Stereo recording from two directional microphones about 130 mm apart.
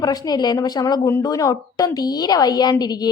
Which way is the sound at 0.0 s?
30° left (ahead or behind).